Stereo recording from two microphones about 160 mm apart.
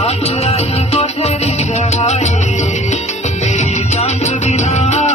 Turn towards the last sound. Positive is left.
turn(degrees=45)  # may be behind; listen again after turning